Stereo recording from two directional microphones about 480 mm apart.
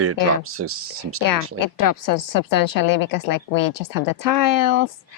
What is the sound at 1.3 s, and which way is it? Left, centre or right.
A woman's voice, left.